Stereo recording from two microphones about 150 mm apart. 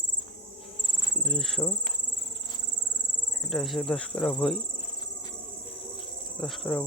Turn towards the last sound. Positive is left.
turn(degrees=5)  # may be behind; listen again after turning